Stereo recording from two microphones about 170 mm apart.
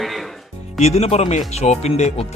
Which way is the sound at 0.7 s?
40° left (ahead or behind).